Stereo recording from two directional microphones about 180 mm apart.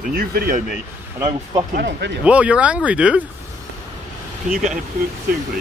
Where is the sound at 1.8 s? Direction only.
75° right (ahead or behind).